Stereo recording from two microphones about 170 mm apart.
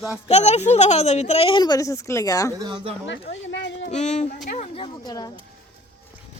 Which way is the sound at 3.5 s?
90° left.